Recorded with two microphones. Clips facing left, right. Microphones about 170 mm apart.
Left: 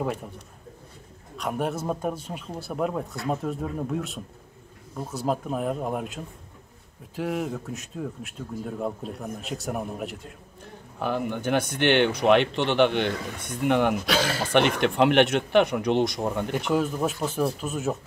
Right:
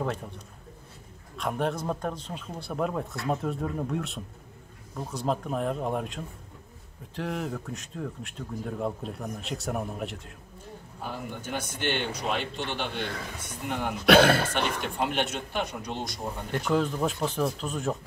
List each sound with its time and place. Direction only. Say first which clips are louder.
0.0 s speech: left 2 dB; 10° left (ahead or behind)
1.3 s speech: left 1 dB; 5° left (ahead or behind)
11.0 s speech: left 9 dB; 70° left (ahead or behind)
14.0 s speech: right 7 dB; 60° right (ahead or behind)
14.5 s speech: left 8 dB; 75° left (ahead or behind)
16.5 s speech: right 2 dB; 5° left (ahead or behind)